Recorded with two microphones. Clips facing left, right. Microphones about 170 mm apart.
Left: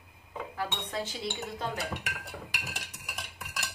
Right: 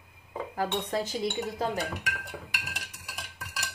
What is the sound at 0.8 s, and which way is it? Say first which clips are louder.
Speech: right 5 dB; 45° right (ahead or behind).